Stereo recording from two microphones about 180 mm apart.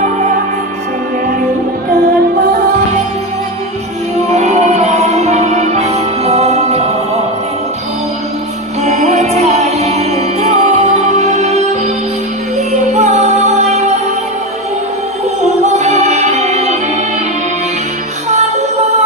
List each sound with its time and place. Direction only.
4.3 s music: 40° right (ahead or behind)
8.8 s music: 40° right (ahead or behind)
15.6 s music: 40° right (ahead or behind)